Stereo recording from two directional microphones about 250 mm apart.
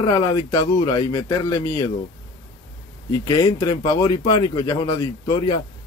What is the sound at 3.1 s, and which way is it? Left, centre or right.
Speech, centre.